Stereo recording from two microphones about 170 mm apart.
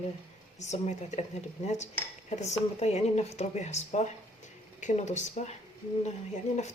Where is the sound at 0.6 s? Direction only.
40° left (ahead or behind).